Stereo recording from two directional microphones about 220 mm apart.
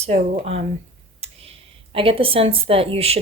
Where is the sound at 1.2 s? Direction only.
25° right (ahead or behind).